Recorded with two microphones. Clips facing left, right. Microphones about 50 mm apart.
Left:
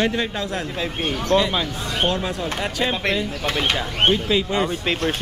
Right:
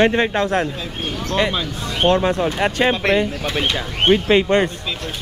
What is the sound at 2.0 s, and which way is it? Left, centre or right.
Speech, right.